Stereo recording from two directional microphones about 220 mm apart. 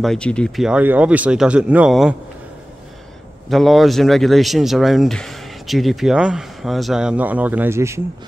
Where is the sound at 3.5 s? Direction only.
Centre (ahead or behind).